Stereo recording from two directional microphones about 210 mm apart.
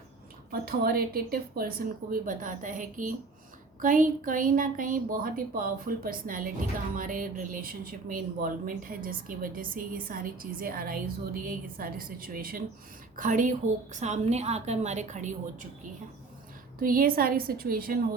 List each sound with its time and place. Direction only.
0.6 s a woman's voice: 45° right (ahead or behind)
16.8 s speech: 40° right (ahead or behind)